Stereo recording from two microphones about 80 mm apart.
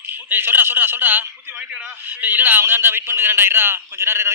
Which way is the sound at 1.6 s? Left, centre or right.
Centre.